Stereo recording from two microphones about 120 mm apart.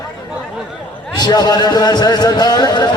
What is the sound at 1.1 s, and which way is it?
A man's voice, 35° left (ahead or behind).